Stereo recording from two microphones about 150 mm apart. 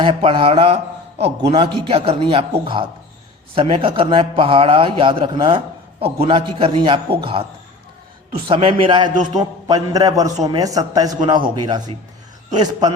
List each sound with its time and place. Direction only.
0.0 s a man's voice: 35° right (ahead or behind)